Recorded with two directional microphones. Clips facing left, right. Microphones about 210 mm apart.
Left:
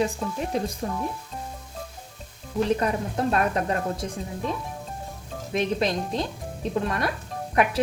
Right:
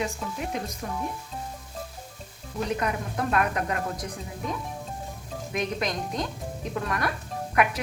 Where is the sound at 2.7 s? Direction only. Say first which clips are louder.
Left 3 dB; 30° left (ahead or behind).